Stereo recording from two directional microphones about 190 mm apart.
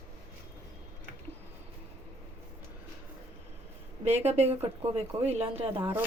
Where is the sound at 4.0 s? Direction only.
35° right (ahead or behind).